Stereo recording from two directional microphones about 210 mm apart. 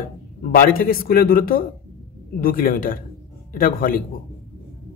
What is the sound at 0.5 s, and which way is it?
Speech, 45° left (ahead or behind).